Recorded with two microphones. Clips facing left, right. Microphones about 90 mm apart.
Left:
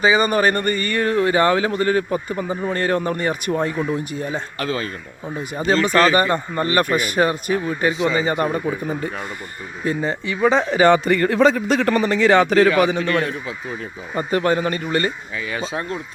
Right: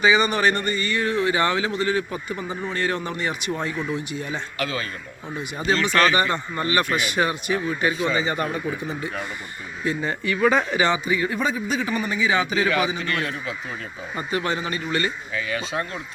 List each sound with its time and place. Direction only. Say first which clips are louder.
0.0 s a man's voice: left 3 dB; 40° left (ahead or behind)
10.2 s speech: left 2 dB; 25° left (ahead or behind)
10.8 s a man's voice: left 7 dB; 65° left (ahead or behind)
13.1 s speech: left 6 dB; 25° left (ahead or behind)
14.2 s a man's voice: left 7 dB; 40° left (ahead or behind)
15.4 s speech: left 4 dB; 25° left (ahead or behind)